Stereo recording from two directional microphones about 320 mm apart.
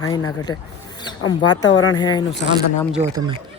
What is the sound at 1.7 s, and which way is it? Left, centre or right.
Speech, left.